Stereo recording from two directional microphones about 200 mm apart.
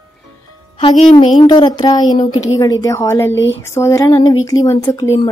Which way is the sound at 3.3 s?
65° left (ahead or behind).